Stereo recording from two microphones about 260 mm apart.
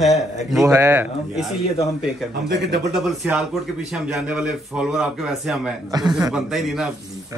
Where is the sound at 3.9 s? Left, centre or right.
Centre.